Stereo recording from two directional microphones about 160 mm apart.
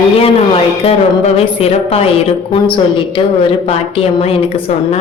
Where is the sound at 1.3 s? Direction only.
40° left (ahead or behind).